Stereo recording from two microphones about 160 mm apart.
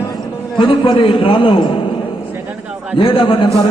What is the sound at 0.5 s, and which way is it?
A man's voice, 35° left (ahead or behind).